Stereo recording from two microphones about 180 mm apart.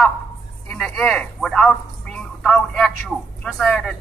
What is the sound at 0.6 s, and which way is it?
Speech, 5° left (ahead or behind).